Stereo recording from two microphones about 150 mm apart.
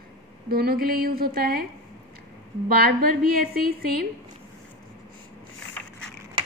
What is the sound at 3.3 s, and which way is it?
Speech, 90° right.